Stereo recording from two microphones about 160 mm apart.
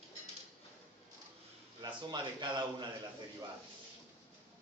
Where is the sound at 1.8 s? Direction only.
30° right (ahead or behind).